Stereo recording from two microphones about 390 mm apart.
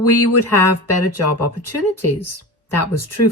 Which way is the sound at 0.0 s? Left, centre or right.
Left.